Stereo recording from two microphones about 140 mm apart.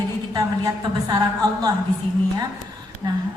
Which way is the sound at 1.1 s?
30° right (ahead or behind).